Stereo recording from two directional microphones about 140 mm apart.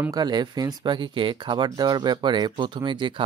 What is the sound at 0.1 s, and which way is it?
Speech, 30° right (ahead or behind).